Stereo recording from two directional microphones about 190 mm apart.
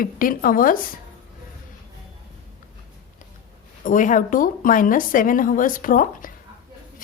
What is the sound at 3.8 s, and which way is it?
A woman's voice, 45° left (ahead or behind).